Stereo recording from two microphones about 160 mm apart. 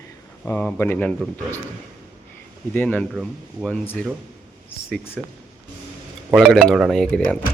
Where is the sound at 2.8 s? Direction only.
10° left (ahead or behind).